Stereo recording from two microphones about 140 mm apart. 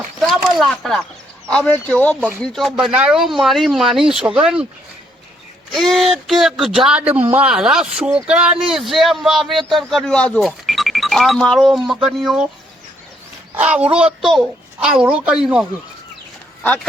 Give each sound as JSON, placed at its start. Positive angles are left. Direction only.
{"t": 0.2, "sound": "speech", "side_deg": 0}
{"t": 5.7, "sound": "speech", "side_deg": 0}
{"t": 7.0, "sound": "a man's voice", "side_deg": -45}
{"t": 7.3, "sound": "speech", "side_deg": -10}
{"t": 13.7, "sound": "a child's voice", "side_deg": -10}